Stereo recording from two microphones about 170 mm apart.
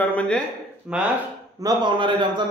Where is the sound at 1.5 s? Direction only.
25° right (ahead or behind).